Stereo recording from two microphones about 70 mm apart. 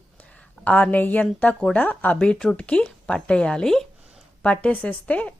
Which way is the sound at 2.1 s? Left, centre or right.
Centre.